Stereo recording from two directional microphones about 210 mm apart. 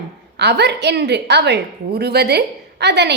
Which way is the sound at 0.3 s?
55° right (ahead or behind).